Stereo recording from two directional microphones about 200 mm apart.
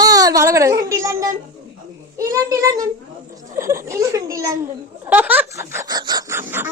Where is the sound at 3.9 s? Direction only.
15° right (ahead or behind).